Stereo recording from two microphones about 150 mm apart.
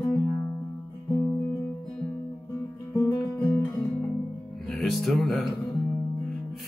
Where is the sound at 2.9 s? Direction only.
25° left (ahead or behind).